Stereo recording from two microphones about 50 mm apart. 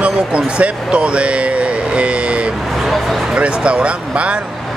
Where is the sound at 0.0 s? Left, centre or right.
Right.